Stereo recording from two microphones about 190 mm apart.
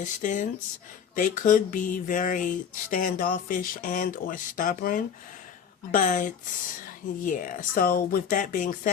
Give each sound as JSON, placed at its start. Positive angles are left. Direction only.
{"t": 0.0, "sound": "speech", "side_deg": 40}